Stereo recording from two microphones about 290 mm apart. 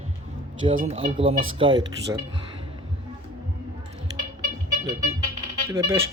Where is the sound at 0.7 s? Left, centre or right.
Right.